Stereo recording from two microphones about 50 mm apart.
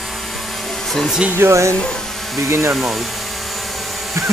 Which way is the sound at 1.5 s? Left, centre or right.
Right.